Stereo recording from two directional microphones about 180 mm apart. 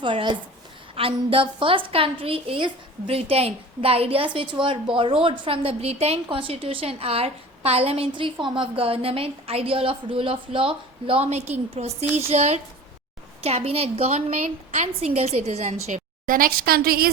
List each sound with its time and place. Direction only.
0.0 s a woman's voice: 25° right (ahead or behind); by 17.1 s 55° right (ahead or behind)